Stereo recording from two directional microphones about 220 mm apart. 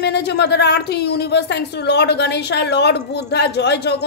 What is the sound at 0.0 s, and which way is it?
A woman's voice, 50° left (ahead or behind).